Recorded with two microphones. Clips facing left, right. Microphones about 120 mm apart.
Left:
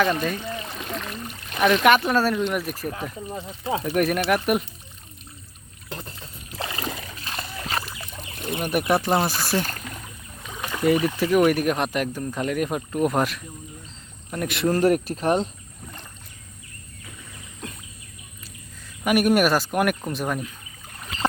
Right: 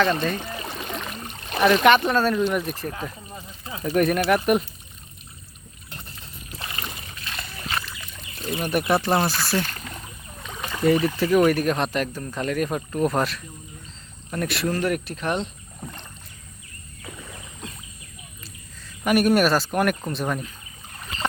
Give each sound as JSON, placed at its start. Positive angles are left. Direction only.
{"t": 0.0, "sound": "speech", "side_deg": 10}
{"t": 0.7, "sound": "rowboat", "side_deg": 0}
{"t": 1.1, "sound": "a sound", "side_deg": -25}
{"t": 1.6, "sound": "speech", "side_deg": 0}
{"t": 3.3, "sound": "speech", "side_deg": 75}
{"t": 3.8, "sound": "speech", "side_deg": 5}
{"t": 7.3, "sound": "splash", "side_deg": 35}
{"t": 8.4, "sound": "speech", "side_deg": 15}
{"t": 9.8, "sound": "speech", "side_deg": 0}
{"t": 14.7, "sound": "speech", "side_deg": 40}
{"t": 19.0, "sound": "speech", "side_deg": 10}